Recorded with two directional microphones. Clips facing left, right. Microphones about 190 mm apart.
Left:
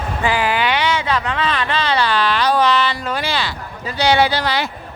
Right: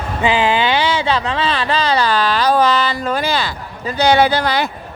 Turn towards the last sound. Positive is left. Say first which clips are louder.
# right 3 dB
turn(degrees=-50)  # may be behind; listen again after turning